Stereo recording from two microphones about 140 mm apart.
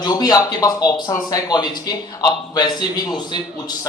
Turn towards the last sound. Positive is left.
turn(degrees=30)  # may be behind; listen again after turning